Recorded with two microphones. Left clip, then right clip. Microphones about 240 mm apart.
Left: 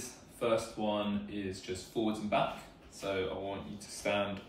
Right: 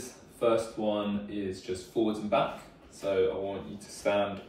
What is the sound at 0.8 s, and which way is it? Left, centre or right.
Speech, left.